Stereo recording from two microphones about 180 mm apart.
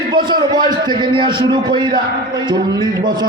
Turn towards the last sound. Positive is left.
turn(degrees=-25)  # may be behind; listen again after turning